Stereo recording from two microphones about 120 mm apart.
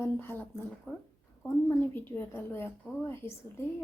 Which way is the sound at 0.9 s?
5° left (ahead or behind).